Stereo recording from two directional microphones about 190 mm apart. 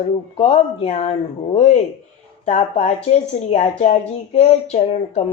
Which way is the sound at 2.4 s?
35° left (ahead or behind).